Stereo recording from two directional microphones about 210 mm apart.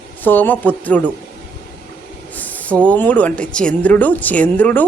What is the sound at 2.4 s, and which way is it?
Speech, 5° left (ahead or behind).